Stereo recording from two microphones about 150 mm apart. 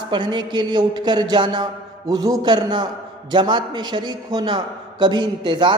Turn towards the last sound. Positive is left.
turn(degrees=-30)  # may be behind; listen again after turning